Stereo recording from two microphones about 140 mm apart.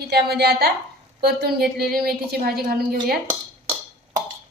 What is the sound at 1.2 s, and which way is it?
A woman's voice, 90° right.